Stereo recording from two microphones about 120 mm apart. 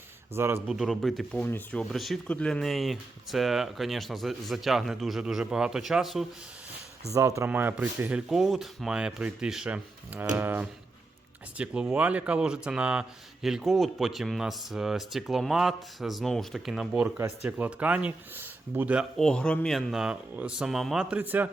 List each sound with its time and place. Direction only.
0.3 s speech: 20° right (ahead or behind)
0.7 s speech: centre (ahead or behind)
1.5 s speech: 15° left (ahead or behind)
1.8 s speech: centre (ahead or behind)
7.1 s speech: 25° right (ahead or behind)
19.1 s speech: 5° left (ahead or behind); by 21.5 s 15° right (ahead or behind)